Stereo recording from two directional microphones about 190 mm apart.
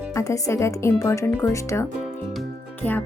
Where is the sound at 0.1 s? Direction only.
15° left (ahead or behind).